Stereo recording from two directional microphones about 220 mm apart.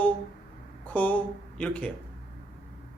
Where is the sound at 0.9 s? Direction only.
5° left (ahead or behind).